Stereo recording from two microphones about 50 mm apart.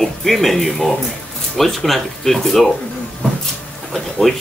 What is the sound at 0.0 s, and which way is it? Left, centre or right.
Speech, centre.